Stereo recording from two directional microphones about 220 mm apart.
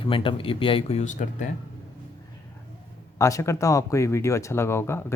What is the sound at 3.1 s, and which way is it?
Speech, 15° left (ahead or behind).